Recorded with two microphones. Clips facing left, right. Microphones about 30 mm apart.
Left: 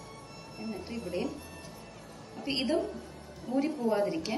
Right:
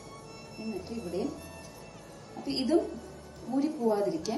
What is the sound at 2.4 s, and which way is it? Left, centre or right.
Speech, left.